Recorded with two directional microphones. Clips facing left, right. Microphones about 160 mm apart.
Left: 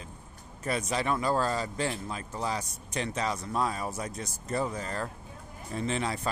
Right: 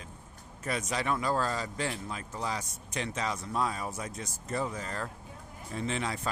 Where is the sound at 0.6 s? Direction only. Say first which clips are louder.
Left 3 dB; 30° left (ahead or behind).